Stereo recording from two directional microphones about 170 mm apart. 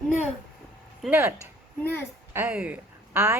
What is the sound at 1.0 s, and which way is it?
A woman's voice, 10° right (ahead or behind).